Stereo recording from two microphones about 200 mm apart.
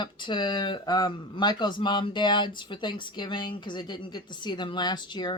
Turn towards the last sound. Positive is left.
turn(degrees=20)  # may be behind; listen again after turning